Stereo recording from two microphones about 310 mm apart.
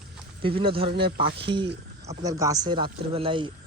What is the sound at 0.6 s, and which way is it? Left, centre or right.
Speech, centre.